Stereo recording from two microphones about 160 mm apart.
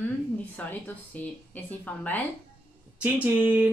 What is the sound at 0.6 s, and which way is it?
A woman's voice, 10° left (ahead or behind).